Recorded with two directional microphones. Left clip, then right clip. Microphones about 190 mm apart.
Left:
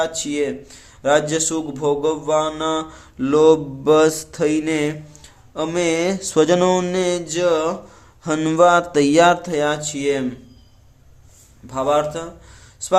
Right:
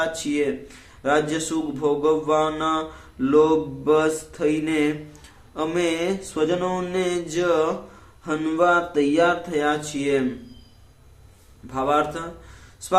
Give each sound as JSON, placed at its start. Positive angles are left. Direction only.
{"t": 0.0, "sound": "speech", "side_deg": 35}
{"t": 11.7, "sound": "speech", "side_deg": 35}